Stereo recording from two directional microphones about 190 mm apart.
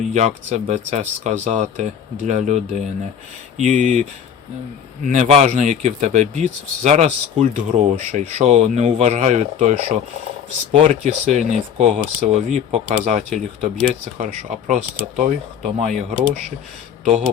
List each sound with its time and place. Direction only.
0.1 s speech: 40° right (ahead or behind)
5.0 s speech: 40° right (ahead or behind)